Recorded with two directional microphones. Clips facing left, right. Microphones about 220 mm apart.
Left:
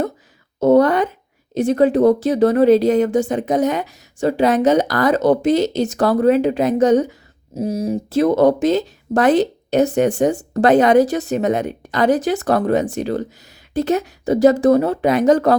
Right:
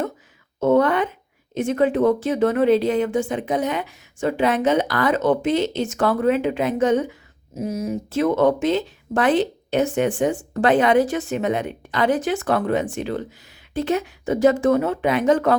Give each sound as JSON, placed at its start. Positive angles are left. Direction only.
{"t": 0.6, "sound": "a woman's voice", "side_deg": 40}